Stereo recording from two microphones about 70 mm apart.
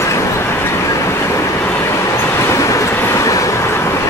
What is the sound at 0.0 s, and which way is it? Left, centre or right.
Vehicle, left.